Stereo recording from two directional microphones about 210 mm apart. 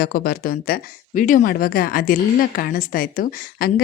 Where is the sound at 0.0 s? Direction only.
45° left (ahead or behind).